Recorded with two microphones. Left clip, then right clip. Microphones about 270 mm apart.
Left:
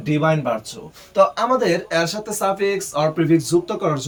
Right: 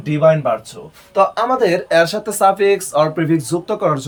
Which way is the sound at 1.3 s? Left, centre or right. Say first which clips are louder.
Right 3 dB; centre.